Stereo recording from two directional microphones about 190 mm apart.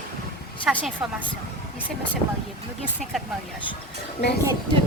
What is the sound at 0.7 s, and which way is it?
Speech, 5° right (ahead or behind).